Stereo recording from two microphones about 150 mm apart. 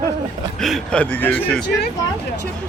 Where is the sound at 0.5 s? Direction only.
Centre (ahead or behind).